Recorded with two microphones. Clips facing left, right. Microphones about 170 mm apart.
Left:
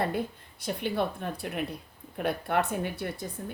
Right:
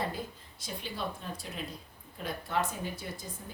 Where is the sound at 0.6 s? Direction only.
60° left (ahead or behind).